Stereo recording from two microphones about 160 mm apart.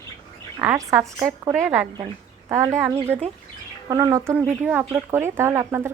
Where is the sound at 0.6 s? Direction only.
15° right (ahead or behind).